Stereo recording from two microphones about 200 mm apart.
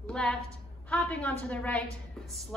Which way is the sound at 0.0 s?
5° left (ahead or behind).